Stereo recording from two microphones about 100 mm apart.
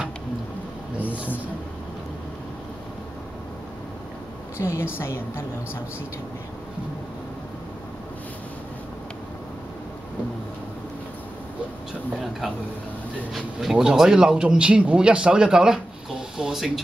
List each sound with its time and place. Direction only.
0.9 s a sound: 15° right (ahead or behind)
4.6 s a woman's voice: 25° left (ahead or behind)
13.3 s speech: 5° right (ahead or behind)